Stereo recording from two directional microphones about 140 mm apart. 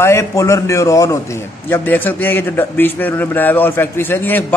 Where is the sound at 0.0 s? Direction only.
20° left (ahead or behind).